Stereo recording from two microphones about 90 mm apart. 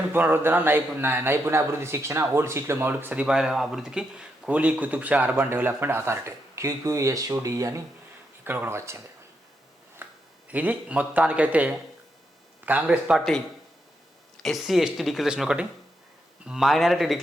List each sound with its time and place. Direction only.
0.1 s a man's voice: 25° right (ahead or behind)
3.2 s speech: 5° right (ahead or behind); by 7.8 s 35° right (ahead or behind)
8.4 s a man's voice: 25° right (ahead or behind)
10.0 s a sound: 20° right (ahead or behind)
10.5 s speech: 15° right (ahead or behind)
13.1 s speech: 5° left (ahead or behind)
14.4 s speech: centre (ahead or behind)